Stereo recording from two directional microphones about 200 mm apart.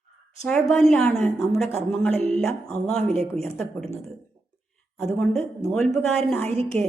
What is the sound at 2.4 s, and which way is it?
A woman's voice, 5° left (ahead or behind).